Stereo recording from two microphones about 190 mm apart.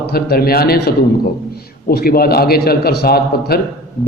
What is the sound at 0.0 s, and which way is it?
A man's voice, 55° left (ahead or behind).